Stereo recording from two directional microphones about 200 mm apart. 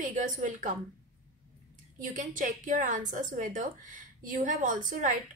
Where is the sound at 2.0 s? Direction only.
40° right (ahead or behind).